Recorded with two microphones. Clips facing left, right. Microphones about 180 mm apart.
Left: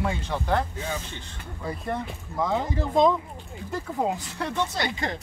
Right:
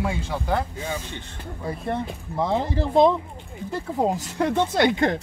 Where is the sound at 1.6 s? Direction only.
25° right (ahead or behind).